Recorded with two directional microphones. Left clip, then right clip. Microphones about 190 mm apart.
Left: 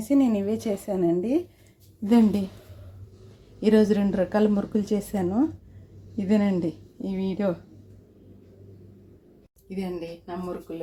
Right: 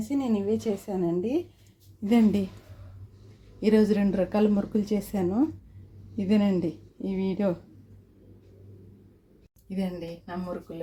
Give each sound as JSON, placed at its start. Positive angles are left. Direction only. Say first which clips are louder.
{"t": 0.1, "sound": "a woman's voice", "louder": "left 5 dB", "side_deg": 25}
{"t": 3.6, "sound": "a woman's voice", "louder": "left 2 dB", "side_deg": 10}
{"t": 9.6, "sound": "a woman's voice", "louder": "left 2 dB", "side_deg": 5}